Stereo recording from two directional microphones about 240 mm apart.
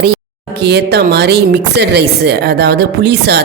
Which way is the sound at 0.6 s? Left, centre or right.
Right.